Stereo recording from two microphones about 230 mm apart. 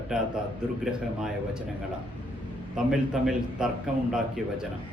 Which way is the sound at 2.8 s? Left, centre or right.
Centre.